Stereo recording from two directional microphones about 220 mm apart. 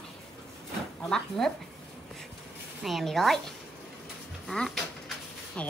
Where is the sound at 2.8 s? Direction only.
Centre (ahead or behind).